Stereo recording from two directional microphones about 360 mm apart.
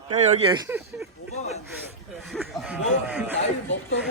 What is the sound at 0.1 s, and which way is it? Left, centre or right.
Speech, centre.